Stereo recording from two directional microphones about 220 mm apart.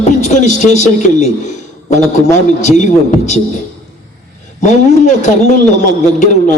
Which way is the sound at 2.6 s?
35° left (ahead or behind).